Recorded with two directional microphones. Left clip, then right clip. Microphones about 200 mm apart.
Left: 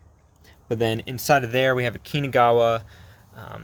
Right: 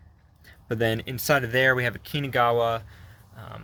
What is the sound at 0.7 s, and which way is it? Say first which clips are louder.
Speech: left 2 dB; 10° left (ahead or behind).